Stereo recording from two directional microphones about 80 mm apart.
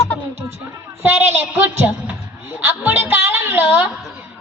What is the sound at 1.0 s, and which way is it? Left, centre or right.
Speech, right.